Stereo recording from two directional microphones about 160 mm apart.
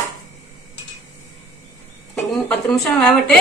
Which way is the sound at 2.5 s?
5° left (ahead or behind).